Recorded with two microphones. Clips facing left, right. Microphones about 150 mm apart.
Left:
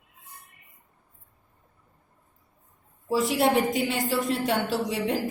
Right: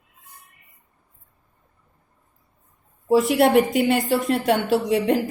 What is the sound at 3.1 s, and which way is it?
A woman's voice, 60° right (ahead or behind).